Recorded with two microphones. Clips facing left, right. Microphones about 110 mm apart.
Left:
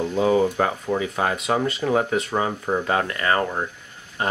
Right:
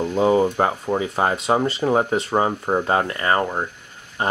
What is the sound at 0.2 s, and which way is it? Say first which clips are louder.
Speech: right 2 dB; 25° right (ahead or behind).